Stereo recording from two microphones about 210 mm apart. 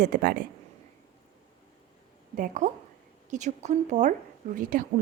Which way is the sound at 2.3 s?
40° right (ahead or behind).